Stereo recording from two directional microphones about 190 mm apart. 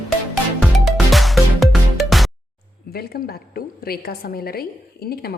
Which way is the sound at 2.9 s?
55° left (ahead or behind).